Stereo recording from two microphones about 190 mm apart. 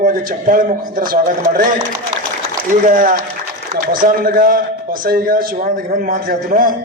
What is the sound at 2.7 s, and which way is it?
A man's voice, 45° right (ahead or behind).